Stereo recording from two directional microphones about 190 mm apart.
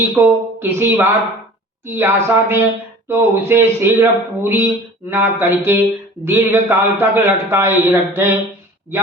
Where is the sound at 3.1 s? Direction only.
10° right (ahead or behind).